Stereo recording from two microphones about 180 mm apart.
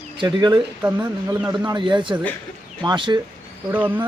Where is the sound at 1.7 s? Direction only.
25° right (ahead or behind).